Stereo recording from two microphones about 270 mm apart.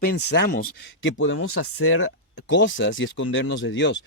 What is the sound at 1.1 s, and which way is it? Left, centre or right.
Speech, left.